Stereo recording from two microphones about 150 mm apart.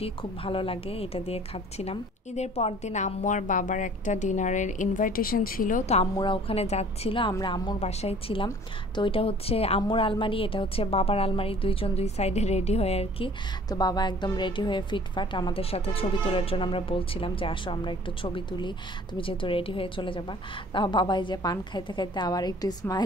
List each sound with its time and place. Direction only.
0.0 s a woman's voice: 35° left (ahead or behind)
6.1 s a woman's voice: 35° left (ahead or behind)
7.8 s a woman's voice: 45° left (ahead or behind)
13.7 s a woman's voice: 25° left (ahead or behind)